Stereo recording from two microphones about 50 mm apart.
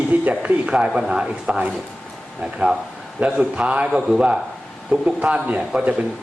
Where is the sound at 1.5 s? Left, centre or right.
Right.